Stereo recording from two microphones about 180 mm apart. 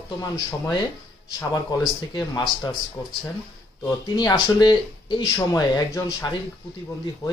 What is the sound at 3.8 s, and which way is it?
Speech, 20° left (ahead or behind).